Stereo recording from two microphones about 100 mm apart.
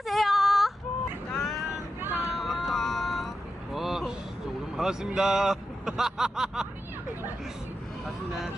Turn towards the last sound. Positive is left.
turn(degrees=-5)  # may be behind; listen again after turning